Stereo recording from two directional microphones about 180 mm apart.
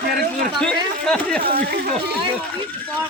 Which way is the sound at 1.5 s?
60° right (ahead or behind).